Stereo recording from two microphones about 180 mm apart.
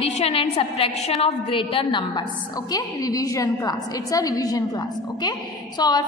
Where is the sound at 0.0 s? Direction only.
35° left (ahead or behind).